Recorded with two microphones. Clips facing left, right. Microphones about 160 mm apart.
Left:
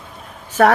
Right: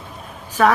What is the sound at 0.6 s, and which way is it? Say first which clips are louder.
Speech: left 2 dB; 60° left (ahead or behind).